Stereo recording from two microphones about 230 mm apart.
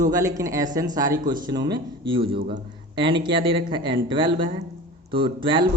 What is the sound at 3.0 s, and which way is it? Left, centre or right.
A man's voice, right.